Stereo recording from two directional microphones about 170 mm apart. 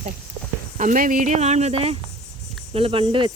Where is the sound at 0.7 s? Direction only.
50° right (ahead or behind); by 3.3 s 30° right (ahead or behind).